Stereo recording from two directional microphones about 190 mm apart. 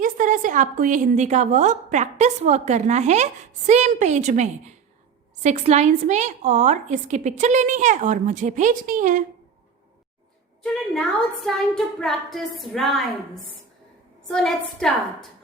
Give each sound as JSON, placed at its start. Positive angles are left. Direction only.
{"t": 0.0, "sound": "a woman's voice", "side_deg": -45}
{"t": 10.6, "sound": "a woman's voice", "side_deg": 0}
{"t": 14.3, "sound": "a woman's voice", "side_deg": 5}